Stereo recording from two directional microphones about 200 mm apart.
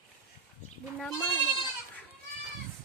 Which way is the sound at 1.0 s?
Centre (ahead or behind).